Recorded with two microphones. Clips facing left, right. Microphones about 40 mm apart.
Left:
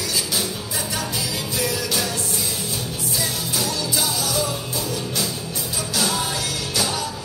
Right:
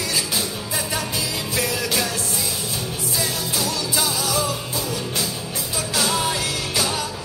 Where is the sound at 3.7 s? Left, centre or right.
Right.